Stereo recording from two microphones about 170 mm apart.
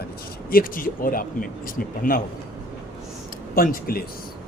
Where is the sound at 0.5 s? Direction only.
55° left (ahead or behind).